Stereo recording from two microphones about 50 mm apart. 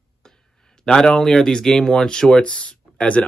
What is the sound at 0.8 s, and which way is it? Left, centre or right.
Speech, centre.